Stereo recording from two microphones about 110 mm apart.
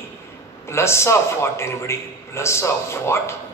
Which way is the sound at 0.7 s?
25° left (ahead or behind).